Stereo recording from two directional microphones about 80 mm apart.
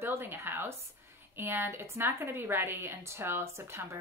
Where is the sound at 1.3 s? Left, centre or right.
Right.